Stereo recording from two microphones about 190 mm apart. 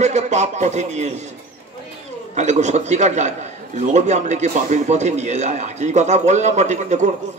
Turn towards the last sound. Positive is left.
turn(degrees=-35)  # may be behind; listen again after turning